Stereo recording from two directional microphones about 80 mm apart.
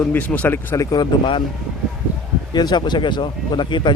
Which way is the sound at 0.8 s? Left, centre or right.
Left.